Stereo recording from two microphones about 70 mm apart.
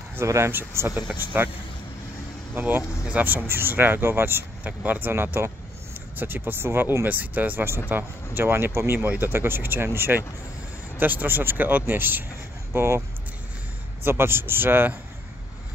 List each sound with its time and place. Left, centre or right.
0.5 s speech: right
2.5 s speech: right
3.4 s speech: right
7.1 s speech: right
14.0 s speech: right